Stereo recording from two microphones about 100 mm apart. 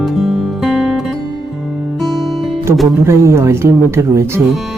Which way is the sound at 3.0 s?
30° right (ahead or behind).